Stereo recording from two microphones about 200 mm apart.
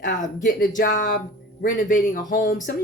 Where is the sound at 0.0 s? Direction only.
40° left (ahead or behind).